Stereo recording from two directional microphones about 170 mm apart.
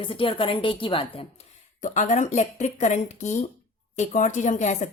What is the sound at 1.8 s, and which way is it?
Speech, 45° left (ahead or behind).